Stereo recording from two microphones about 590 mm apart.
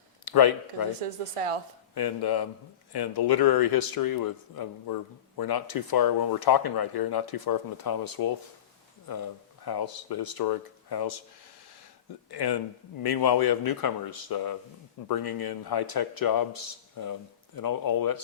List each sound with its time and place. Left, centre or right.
0.3 s a man's voice: left
1.0 s speech: right
2.0 s a man's voice: left
9.6 s a man's voice: left
12.3 s a man's voice: left